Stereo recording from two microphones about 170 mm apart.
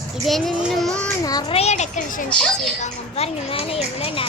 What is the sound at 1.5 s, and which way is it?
Speech, 40° left (ahead or behind).